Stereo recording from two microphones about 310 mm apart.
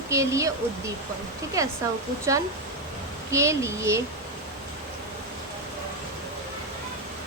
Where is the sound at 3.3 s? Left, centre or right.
Centre.